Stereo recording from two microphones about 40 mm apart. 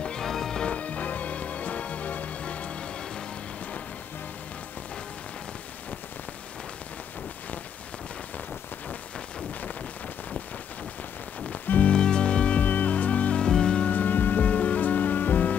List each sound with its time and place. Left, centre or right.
0.2 s music: centre
0.7 s music: left
11.5 s music: left
11.9 s music: left
12.5 s music: left
13.4 s music: left
13.8 s music: left